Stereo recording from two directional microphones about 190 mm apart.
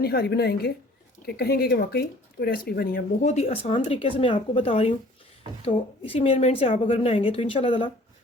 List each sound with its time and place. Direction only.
0.0 s a woman's voice: 55° left (ahead or behind); by 7.9 s 25° left (ahead or behind)